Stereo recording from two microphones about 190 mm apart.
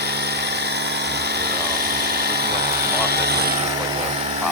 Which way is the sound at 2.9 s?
55° right (ahead or behind).